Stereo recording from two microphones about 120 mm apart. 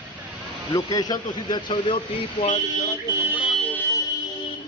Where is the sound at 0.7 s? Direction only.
35° left (ahead or behind).